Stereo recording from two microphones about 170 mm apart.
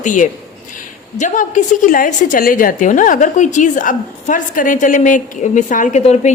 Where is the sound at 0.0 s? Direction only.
50° left (ahead or behind).